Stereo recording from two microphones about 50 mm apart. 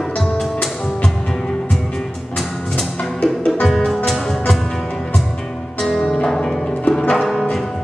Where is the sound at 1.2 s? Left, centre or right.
Centre.